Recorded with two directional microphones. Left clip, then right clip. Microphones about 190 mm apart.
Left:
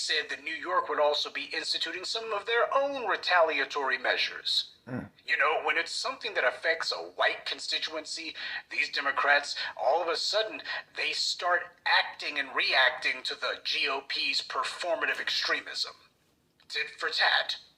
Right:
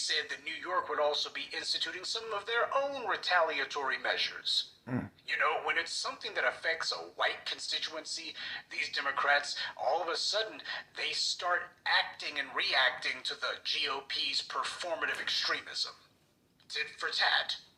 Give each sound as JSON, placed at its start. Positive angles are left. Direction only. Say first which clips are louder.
{"t": 0.0, "sound": "speech", "louder": "left 3 dB", "side_deg": 25}
{"t": 4.9, "sound": "speech", "louder": "right 1 dB", "side_deg": 5}
{"t": 5.3, "sound": "speech", "louder": "left 4 dB", "side_deg": 25}